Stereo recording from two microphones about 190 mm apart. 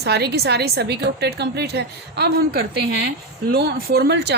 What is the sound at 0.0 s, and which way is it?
Speech, 60° right (ahead or behind).